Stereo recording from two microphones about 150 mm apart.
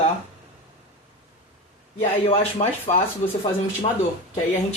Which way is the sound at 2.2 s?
45° left (ahead or behind).